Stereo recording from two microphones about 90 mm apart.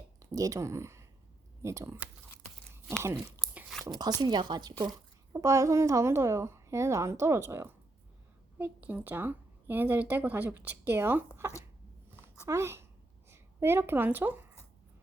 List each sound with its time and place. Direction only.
0.2 s a woman's voice: 40° right (ahead or behind)
3.0 s a sound: 20° right (ahead or behind)
3.8 s a woman's voice: 50° right (ahead or behind)
5.3 s a woman's voice: 35° right (ahead or behind)